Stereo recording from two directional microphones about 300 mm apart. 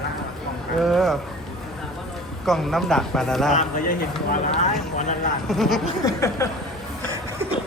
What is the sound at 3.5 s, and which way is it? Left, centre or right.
Speech, left.